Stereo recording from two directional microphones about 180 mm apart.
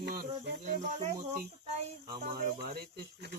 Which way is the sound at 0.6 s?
40° right (ahead or behind).